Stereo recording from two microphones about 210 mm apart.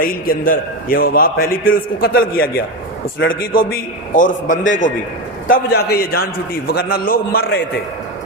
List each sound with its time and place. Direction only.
0.0 s a man's voice: 40° left (ahead or behind)
5.5 s a man's voice: 50° left (ahead or behind)